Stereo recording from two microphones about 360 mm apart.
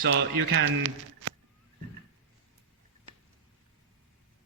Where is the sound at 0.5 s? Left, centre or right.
Right.